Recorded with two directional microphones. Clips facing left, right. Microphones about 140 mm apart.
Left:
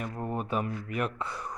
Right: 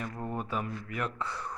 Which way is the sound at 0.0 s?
15° left (ahead or behind).